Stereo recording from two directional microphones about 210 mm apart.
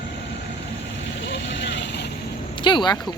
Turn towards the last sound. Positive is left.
turn(degrees=20)  # may be behind; listen again after turning